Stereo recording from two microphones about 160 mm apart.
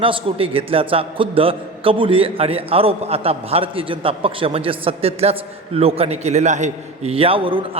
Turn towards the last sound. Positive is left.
turn(degrees=-35)  # may be behind; listen again after turning